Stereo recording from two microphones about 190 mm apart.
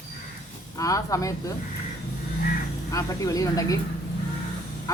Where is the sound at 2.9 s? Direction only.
20° left (ahead or behind).